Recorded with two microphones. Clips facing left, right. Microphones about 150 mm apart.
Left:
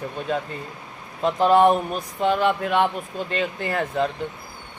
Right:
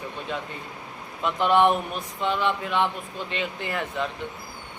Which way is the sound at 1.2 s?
35° left (ahead or behind).